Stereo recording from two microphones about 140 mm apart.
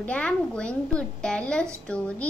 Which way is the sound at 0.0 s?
10° left (ahead or behind).